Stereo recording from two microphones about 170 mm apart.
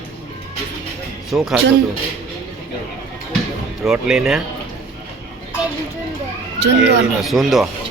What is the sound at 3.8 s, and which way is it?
Speech, centre (ahead or behind).